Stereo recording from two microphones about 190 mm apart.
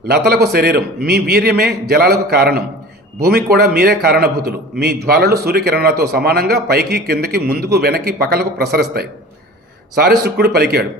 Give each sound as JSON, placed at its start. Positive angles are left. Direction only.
{"t": 0.1, "sound": "speech", "side_deg": -55}